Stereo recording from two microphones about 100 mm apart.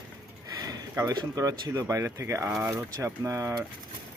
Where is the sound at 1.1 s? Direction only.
35° right (ahead or behind).